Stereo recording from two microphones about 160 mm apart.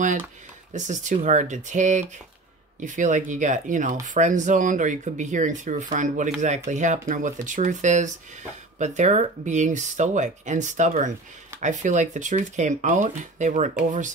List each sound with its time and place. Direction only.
0.7 s speech: 50° right (ahead or behind)